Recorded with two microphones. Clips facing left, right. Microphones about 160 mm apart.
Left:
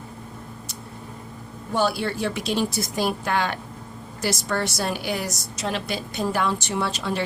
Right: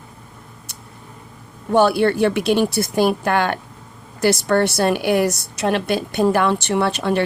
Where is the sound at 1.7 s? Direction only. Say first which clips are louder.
Right 9 dB; 60° right (ahead or behind).